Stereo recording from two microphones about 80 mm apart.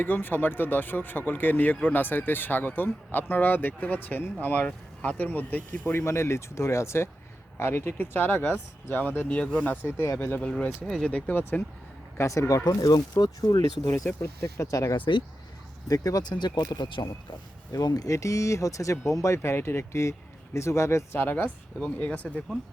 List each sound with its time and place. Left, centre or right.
0.0 s speech: left
5.9 s speech: left
10.8 s speech: centre
12.1 s speech: left
12.6 s speech: left
14.2 s speech: left
14.9 s speech: left
15.9 s speech: left
16.3 s speech: left
17.7 s speech: left
21.2 s speech: left